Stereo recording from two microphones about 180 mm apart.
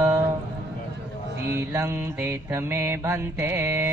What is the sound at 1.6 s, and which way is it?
Mantra, 15° right (ahead or behind).